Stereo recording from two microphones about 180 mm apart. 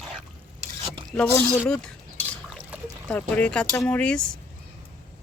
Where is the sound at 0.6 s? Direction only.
30° right (ahead or behind).